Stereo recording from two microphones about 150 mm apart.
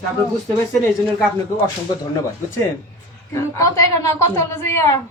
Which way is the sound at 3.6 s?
20° left (ahead or behind).